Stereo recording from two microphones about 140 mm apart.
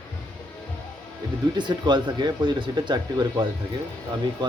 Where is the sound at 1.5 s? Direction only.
30° right (ahead or behind).